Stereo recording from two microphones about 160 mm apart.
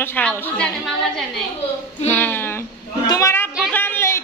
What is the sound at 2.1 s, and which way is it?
A child's voice, 15° left (ahead or behind).